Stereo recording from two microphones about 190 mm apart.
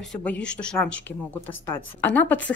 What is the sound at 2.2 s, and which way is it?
Speech, 10° left (ahead or behind).